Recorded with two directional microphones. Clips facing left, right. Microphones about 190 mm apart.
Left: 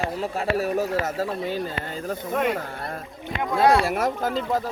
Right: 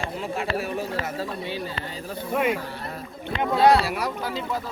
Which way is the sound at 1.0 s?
45° left (ahead or behind).